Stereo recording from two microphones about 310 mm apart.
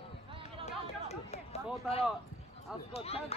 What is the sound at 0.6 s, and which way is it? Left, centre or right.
Chatter, left.